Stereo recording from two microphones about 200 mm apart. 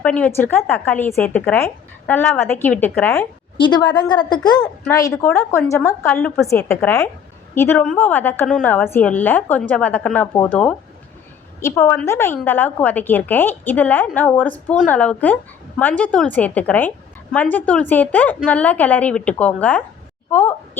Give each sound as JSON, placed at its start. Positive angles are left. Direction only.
{"t": 0.0, "sound": "a woman's voice", "side_deg": 5}
{"t": 3.6, "sound": "a woman's voice", "side_deg": 20}